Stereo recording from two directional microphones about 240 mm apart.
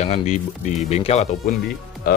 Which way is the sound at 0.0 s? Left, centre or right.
Left.